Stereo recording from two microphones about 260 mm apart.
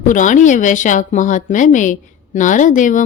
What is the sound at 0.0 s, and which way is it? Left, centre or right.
A woman's voice, left.